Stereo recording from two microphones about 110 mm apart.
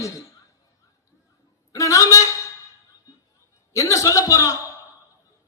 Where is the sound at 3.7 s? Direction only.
30° left (ahead or behind).